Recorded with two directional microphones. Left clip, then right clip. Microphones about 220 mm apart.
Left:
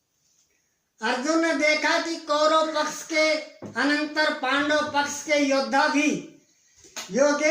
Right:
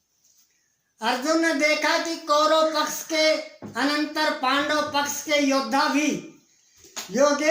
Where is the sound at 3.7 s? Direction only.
35° right (ahead or behind).